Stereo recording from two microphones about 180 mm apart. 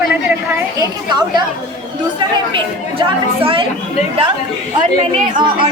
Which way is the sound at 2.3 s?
25° right (ahead or behind).